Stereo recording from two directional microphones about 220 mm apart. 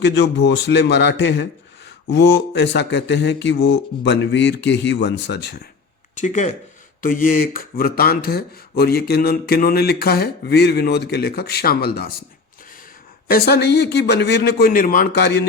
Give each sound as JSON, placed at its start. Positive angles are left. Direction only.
{"t": 0.0, "sound": "speech", "side_deg": 50}
{"t": 6.1, "sound": "speech", "side_deg": 35}
{"t": 13.2, "sound": "speech", "side_deg": 45}